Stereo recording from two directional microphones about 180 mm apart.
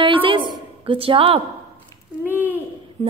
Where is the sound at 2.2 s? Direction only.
10° right (ahead or behind).